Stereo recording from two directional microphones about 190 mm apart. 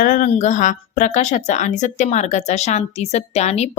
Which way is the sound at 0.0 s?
45° left (ahead or behind).